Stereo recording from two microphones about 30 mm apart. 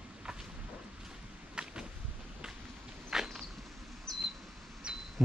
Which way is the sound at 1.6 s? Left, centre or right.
Right.